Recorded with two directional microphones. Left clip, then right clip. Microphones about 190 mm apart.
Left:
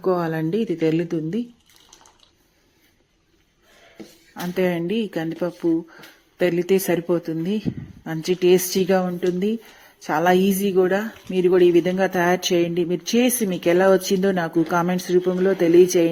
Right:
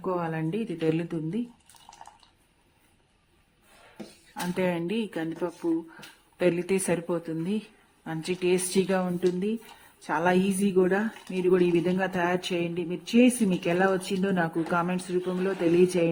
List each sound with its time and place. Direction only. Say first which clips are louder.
0.0 s speech: left 8 dB; 20° left (ahead or behind)
4.5 s speech: left 7 dB; 15° left (ahead or behind)